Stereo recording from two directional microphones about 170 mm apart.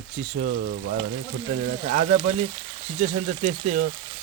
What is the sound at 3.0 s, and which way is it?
Speech, 45° right (ahead or behind).